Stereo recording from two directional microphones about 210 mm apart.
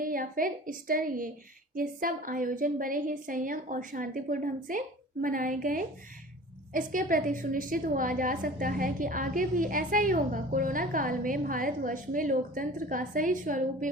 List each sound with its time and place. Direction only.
0.0 s a woman's voice: 40° right (ahead or behind)